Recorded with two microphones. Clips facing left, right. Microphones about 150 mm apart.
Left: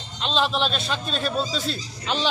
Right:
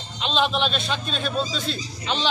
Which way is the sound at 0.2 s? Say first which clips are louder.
Right 1 dB; centre (ahead or behind).